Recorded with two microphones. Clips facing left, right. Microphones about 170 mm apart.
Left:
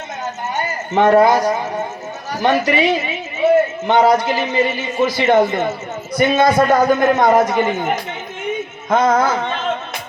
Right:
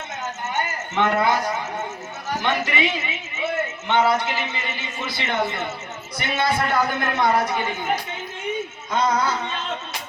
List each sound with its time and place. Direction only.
0.4 s a man's voice: 40° left (ahead or behind)
8.9 s a man's voice: 50° left (ahead or behind)